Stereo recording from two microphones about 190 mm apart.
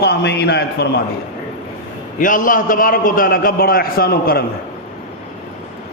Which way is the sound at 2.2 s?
45° left (ahead or behind).